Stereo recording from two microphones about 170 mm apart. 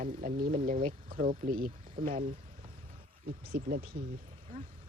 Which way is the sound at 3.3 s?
55° right (ahead or behind).